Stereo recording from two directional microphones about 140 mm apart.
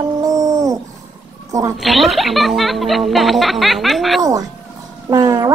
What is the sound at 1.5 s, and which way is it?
Speech, 25° right (ahead or behind).